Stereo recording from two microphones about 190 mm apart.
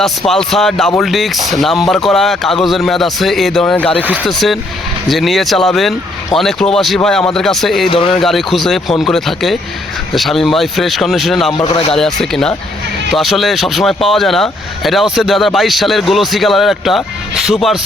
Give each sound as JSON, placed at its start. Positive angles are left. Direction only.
{"t": 0.0, "sound": "speech", "side_deg": 0}
{"t": 4.0, "sound": "speech", "side_deg": -10}
{"t": 7.9, "sound": "speech", "side_deg": 30}
{"t": 8.2, "sound": "speech", "side_deg": 0}
{"t": 11.5, "sound": "speech", "side_deg": 20}
{"t": 11.9, "sound": "speech", "side_deg": 0}